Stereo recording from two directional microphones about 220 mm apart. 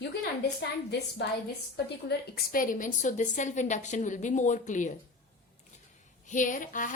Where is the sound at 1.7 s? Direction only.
45° left (ahead or behind).